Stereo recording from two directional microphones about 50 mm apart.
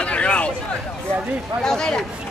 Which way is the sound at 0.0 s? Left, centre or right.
Left.